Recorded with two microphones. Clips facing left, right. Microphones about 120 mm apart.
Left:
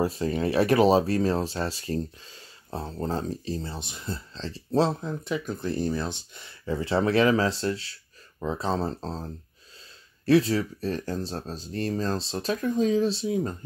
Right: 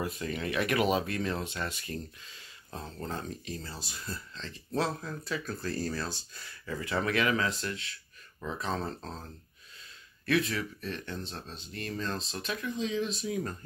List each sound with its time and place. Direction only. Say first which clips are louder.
0.0 s speech: left 9 dB; 30° left (ahead or behind)